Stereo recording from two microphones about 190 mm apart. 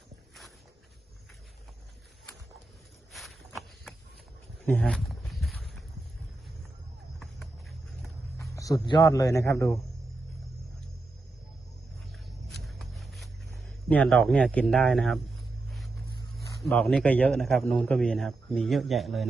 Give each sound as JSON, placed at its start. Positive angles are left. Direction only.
{"t": 3.1, "sound": "walk", "side_deg": 0}
{"t": 4.6, "sound": "a sound", "side_deg": 5}
{"t": 8.4, "sound": "a man's voice", "side_deg": 20}
{"t": 12.5, "sound": "a sound", "side_deg": 0}
{"t": 13.8, "sound": "speech", "side_deg": 5}
{"t": 16.6, "sound": "speech", "side_deg": 0}